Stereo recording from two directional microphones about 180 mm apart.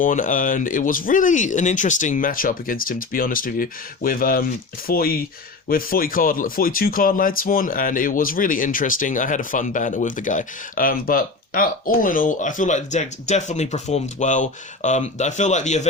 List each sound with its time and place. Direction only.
0.0 s speech: 45° left (ahead or behind)